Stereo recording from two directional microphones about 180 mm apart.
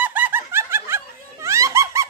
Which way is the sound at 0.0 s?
10° right (ahead or behind).